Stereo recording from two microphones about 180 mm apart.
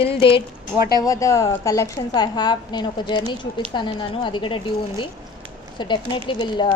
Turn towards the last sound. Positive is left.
turn(degrees=25)  # may be behind; listen again after turning